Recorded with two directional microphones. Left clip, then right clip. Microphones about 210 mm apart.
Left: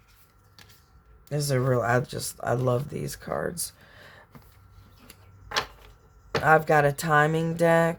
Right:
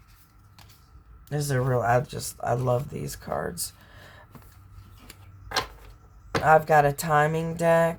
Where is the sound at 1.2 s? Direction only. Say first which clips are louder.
Left 2 dB; 30° left (ahead or behind).